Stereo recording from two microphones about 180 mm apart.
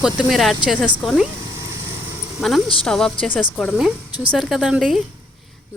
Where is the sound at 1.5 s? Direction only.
15° right (ahead or behind).